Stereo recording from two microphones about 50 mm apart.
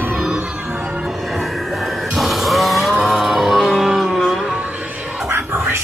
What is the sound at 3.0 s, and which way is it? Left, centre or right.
Music, centre.